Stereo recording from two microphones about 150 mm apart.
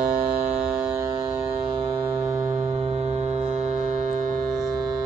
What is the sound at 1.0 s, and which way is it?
Music, 25° right (ahead or behind).